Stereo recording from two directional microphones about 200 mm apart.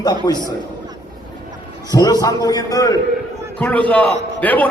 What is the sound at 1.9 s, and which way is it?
A man's voice, 20° left (ahead or behind).